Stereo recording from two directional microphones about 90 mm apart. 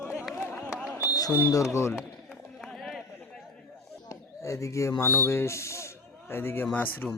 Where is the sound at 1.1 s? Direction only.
40° left (ahead or behind).